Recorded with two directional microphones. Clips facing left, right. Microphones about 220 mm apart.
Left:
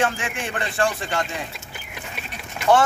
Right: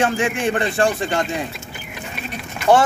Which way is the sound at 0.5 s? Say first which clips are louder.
Right 4 dB; 35° right (ahead or behind).